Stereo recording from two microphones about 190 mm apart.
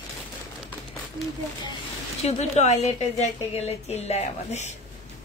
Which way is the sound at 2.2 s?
35° left (ahead or behind).